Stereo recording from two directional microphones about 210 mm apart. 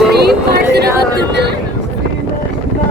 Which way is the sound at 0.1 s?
50° right (ahead or behind).